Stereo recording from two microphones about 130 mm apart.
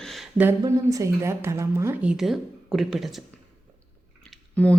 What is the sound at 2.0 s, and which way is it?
A woman's voice, 5° right (ahead or behind).